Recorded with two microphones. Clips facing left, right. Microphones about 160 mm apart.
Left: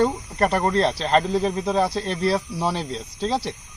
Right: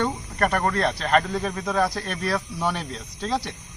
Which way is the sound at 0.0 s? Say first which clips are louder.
Left 4 dB; 30° left (ahead or behind).